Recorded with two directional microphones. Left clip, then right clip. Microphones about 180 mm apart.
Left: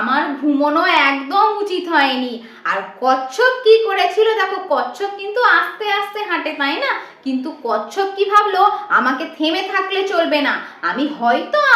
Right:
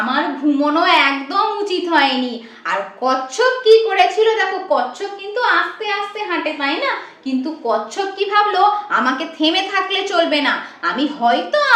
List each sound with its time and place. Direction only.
0.6 s a woman's voice: 10° right (ahead or behind); by 8.0 s 15° left (ahead or behind)
8.3 s a woman's voice: centre (ahead or behind)